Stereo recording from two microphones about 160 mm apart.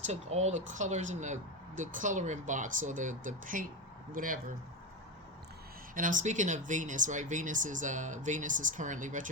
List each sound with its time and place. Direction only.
0.0 s speech: 45° right (ahead or behind); by 4.4 s 60° right (ahead or behind)
5.9 s speech: 55° right (ahead or behind)